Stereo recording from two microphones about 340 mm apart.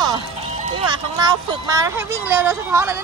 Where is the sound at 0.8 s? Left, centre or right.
Centre.